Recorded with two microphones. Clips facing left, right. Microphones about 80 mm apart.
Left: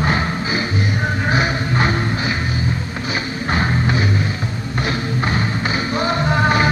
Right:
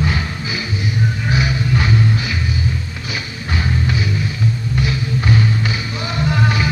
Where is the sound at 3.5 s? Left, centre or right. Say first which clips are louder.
Left 2 dB; left.